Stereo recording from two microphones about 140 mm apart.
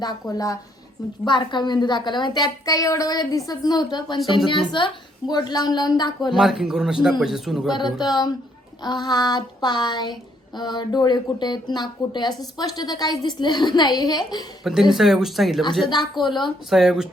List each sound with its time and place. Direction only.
0.0 s speech: 25° left (ahead or behind)
1.2 s child singing: 35° left (ahead or behind)
5.3 s speech: 30° left (ahead or behind)
6.3 s speech: 5° right (ahead or behind)
7.7 s child singing: 30° left (ahead or behind)
8.0 s speech: 30° left (ahead or behind)
8.8 s child singing: 30° left (ahead or behind)
14.6 s speech: 5° right (ahead or behind)
16.2 s child singing: 30° left (ahead or behind)
16.6 s speech: centre (ahead or behind)